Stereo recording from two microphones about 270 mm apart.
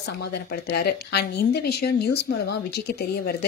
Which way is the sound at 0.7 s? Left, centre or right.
Left.